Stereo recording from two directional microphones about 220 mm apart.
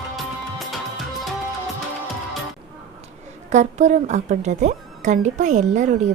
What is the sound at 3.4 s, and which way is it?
A woman's voice, 30° right (ahead or behind).